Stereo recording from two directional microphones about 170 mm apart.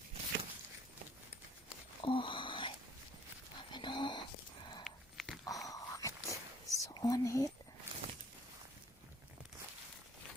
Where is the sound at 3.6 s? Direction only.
25° left (ahead or behind).